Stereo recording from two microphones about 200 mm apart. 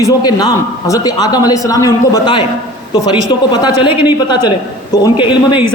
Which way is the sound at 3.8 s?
25° left (ahead or behind).